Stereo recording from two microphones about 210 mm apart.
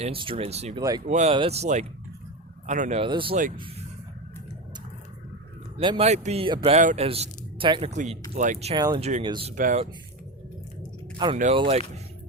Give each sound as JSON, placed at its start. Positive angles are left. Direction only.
{"t": 0.0, "sound": "speech", "side_deg": -25}
{"t": 0.8, "sound": "speech", "side_deg": -15}
{"t": 1.0, "sound": "speech", "side_deg": -35}
{"t": 3.0, "sound": "speech", "side_deg": -25}
{"t": 5.7, "sound": "speech", "side_deg": -25}
{"t": 9.6, "sound": "speech", "side_deg": -40}
{"t": 11.2, "sound": "speech", "side_deg": -20}